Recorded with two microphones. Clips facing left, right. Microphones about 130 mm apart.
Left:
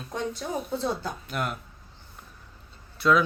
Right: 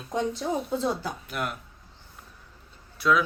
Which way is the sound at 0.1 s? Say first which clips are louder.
Right 4 dB; 20° right (ahead or behind).